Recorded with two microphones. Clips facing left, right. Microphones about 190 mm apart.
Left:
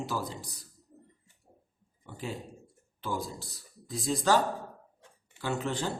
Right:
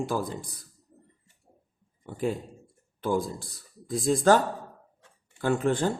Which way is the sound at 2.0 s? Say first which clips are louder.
Right 9 dB; 50° right (ahead or behind).